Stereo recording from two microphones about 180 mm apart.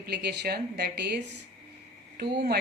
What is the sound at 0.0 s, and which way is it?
A woman's voice, 65° right (ahead or behind).